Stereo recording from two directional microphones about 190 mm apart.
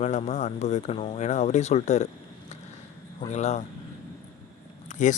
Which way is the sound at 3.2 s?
35° left (ahead or behind).